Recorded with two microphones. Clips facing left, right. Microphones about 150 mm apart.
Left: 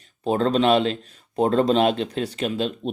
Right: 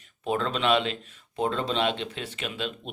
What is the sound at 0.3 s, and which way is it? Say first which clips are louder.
A man's voice: left 6 dB; 35° left (ahead or behind).